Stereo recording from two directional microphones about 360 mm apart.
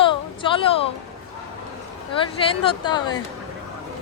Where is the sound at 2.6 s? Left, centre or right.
Centre.